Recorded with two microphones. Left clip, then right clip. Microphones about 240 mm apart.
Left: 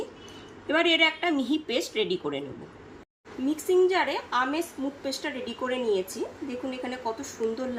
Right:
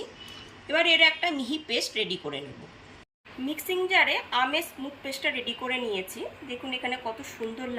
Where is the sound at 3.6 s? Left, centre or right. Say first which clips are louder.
Even; centre.